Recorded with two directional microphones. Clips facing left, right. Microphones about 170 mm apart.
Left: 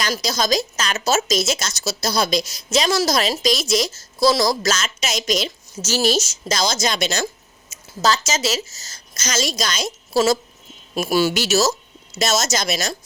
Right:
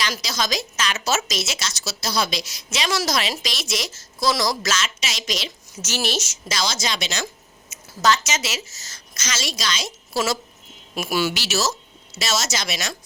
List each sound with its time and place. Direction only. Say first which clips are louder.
0.0 s a woman's voice: left 4 dB; 40° left (ahead or behind)
7.7 s a woman's voice: even; 35° left (ahead or behind)
10.9 s a woman's voice: left 5 dB; 35° left (ahead or behind)